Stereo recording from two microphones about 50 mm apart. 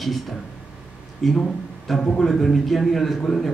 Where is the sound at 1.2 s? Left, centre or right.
Centre.